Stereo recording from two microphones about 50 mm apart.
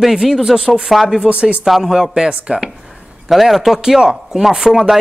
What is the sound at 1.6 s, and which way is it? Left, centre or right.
Speech, centre.